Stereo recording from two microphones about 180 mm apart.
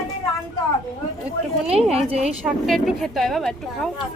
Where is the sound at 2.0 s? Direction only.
35° right (ahead or behind).